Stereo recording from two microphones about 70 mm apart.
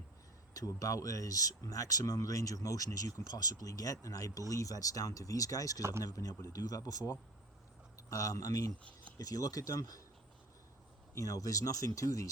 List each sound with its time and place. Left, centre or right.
0.5 s speech: left
7.9 s speech: left
11.1 s speech: left